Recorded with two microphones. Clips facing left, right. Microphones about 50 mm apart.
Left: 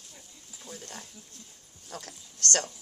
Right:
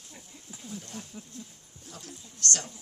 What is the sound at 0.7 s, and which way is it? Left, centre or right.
Speech, left.